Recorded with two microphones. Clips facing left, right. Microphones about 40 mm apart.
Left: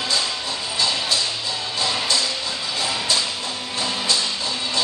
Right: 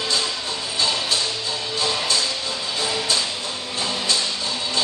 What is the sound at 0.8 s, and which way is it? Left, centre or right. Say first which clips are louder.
Music: even; right.